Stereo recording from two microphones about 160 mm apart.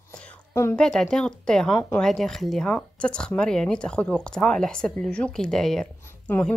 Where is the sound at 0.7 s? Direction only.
5° left (ahead or behind).